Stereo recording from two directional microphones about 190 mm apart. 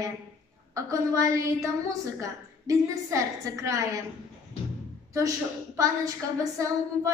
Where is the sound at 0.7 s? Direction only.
15° right (ahead or behind).